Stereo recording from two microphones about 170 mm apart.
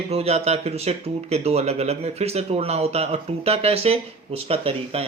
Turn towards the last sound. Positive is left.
turn(degrees=-35)  # may be behind; listen again after turning